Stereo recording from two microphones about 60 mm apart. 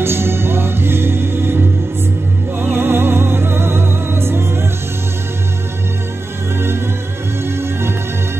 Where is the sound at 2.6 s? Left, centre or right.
Right.